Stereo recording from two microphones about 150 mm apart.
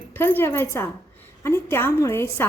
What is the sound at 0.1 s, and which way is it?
A woman's voice, 15° left (ahead or behind).